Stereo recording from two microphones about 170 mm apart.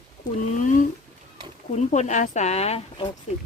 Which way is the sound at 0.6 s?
50° left (ahead or behind).